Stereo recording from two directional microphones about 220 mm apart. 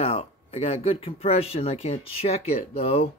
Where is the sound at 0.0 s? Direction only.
25° left (ahead or behind).